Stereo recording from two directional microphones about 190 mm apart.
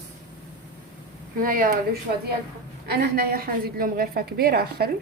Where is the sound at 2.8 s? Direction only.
55° right (ahead or behind).